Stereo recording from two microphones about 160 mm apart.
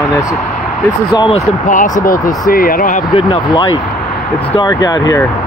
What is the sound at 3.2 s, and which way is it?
Speech, 30° left (ahead or behind).